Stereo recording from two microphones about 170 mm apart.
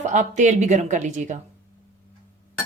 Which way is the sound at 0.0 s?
45° right (ahead or behind).